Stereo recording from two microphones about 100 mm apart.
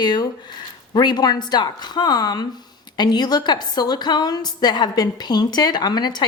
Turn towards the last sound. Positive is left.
turn(degrees=45)  # may be behind; listen again after turning